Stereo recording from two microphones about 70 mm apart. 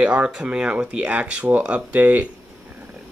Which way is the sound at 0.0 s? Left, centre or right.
Centre.